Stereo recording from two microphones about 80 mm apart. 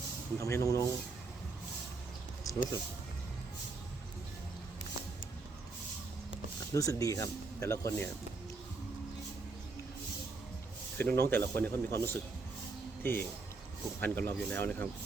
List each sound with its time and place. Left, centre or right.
0.3 s speech: left
2.4 s a sound: left
6.7 s speech: left
10.9 s speech: left